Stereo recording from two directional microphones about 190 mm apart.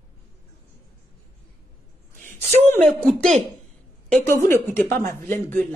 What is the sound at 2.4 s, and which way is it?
Speech, 5° left (ahead or behind).